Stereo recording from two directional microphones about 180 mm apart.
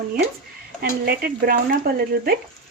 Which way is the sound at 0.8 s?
55° right (ahead or behind).